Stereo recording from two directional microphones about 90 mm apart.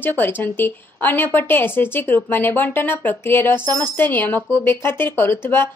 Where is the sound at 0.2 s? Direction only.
20° left (ahead or behind).